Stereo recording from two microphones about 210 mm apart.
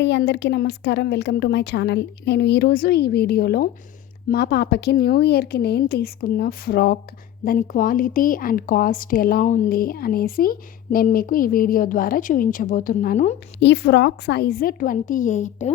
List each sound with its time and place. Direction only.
0.0 s speech: 55° left (ahead or behind); by 13.3 s 40° left (ahead or behind)
13.6 s speech: 55° left (ahead or behind); by 15.7 s 35° left (ahead or behind)